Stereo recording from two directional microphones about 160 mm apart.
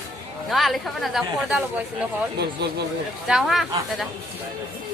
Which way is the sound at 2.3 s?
90° right.